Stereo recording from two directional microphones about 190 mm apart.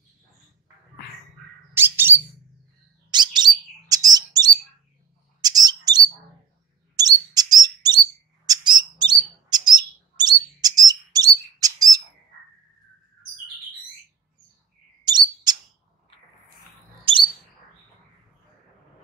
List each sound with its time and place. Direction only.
1.7 s bird: 10° right (ahead or behind)
3.1 s bird: 20° right (ahead or behind)
15.0 s bird: 20° right (ahead or behind)